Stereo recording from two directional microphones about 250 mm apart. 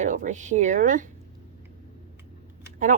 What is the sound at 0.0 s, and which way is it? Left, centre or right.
Speech, right.